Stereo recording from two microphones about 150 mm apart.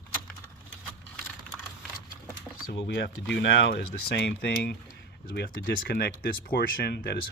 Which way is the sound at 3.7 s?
90° left.